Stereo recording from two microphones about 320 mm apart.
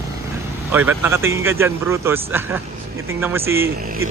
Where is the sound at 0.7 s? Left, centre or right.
Centre.